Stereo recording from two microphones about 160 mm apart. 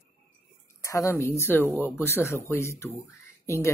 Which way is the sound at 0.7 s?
20° left (ahead or behind).